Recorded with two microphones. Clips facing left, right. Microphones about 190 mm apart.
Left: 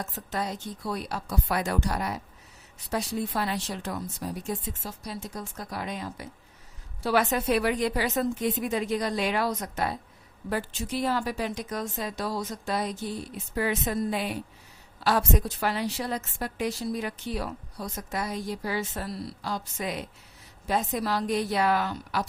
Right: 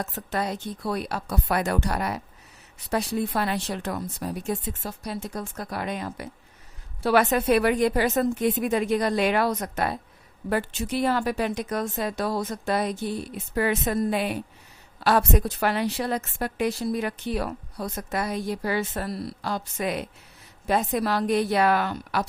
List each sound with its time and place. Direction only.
0.0 s a woman's voice: 65° right (ahead or behind)